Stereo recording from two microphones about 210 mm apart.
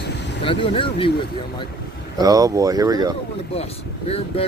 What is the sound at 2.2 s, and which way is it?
Speech, 15° right (ahead or behind).